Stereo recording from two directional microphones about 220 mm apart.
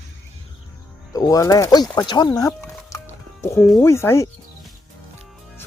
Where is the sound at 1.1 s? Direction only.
15° left (ahead or behind).